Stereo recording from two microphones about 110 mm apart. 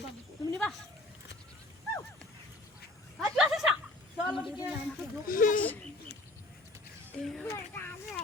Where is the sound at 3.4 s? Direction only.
5° right (ahead or behind).